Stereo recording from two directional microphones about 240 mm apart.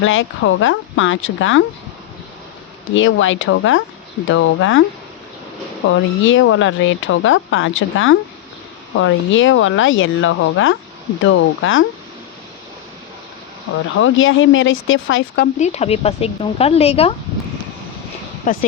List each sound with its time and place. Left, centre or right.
0.0 s speech: left
2.9 s speech: left
5.9 s speech: left
14.0 s speech: left
15.5 s speech: left
18.5 s speech: left